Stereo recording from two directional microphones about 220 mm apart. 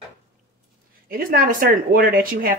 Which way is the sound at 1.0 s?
40° right (ahead or behind).